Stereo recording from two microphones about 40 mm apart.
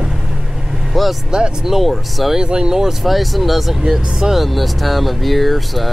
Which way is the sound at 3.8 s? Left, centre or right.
Centre.